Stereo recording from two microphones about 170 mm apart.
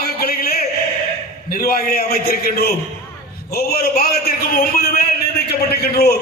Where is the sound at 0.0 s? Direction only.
65° left (ahead or behind).